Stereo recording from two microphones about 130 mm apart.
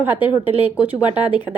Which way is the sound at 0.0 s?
15° right (ahead or behind).